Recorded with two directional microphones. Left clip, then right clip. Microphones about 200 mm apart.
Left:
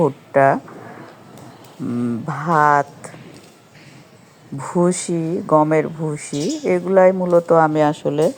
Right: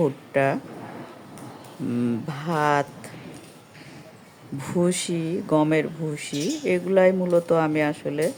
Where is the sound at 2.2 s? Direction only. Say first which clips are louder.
Left 10 dB; 10° right (ahead or behind).